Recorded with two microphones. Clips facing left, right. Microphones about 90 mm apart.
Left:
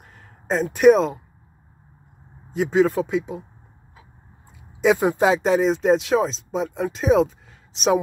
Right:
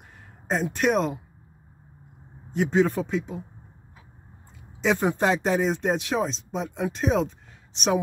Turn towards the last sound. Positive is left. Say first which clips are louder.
# left 5 dB
turn(degrees=0)  # may be behind; listen again after turning